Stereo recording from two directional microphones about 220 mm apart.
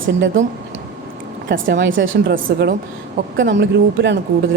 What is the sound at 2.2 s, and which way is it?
Speech, 40° right (ahead or behind).